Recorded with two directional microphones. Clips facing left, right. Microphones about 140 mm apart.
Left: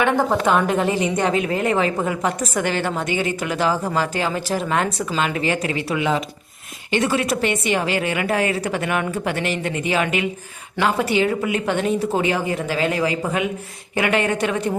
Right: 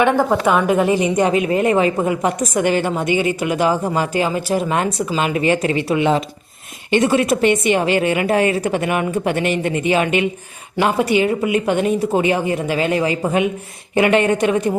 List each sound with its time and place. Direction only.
0.2 s a woman's voice: 10° right (ahead or behind)